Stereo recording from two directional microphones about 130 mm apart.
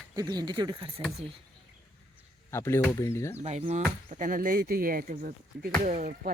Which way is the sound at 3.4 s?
50° right (ahead or behind).